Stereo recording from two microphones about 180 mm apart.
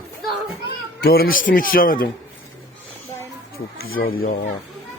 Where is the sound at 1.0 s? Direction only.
60° left (ahead or behind).